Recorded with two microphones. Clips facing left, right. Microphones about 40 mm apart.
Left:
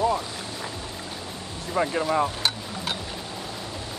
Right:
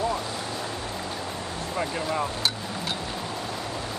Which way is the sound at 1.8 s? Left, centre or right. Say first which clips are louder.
Left 5 dB; centre.